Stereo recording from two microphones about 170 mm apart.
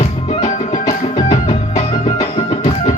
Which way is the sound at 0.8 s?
25° left (ahead or behind).